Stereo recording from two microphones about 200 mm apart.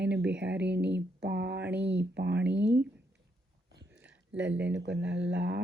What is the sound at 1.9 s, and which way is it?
Speech, 60° right (ahead or behind).